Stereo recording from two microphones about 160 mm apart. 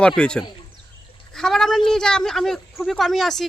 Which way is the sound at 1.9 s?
5° left (ahead or behind).